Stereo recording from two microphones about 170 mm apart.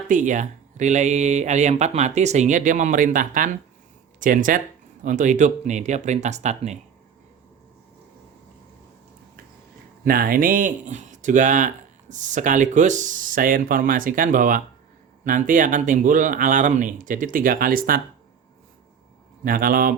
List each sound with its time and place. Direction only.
0.1 s speech: 50° right (ahead or behind)
10.0 s speech: 60° right (ahead or behind)
19.5 s a man's voice: 60° right (ahead or behind)